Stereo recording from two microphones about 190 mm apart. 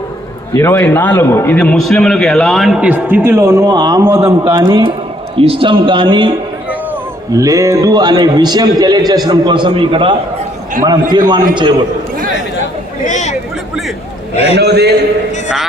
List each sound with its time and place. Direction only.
0.5 s a man's voice: 15° left (ahead or behind); by 6.3 s 25° right (ahead or behind)
7.3 s a man's voice: 15° right (ahead or behind)
13.1 s a sound: 40° left (ahead or behind)
14.3 s a man's voice: 35° left (ahead or behind)
14.6 s a man's voice: 60° right (ahead or behind)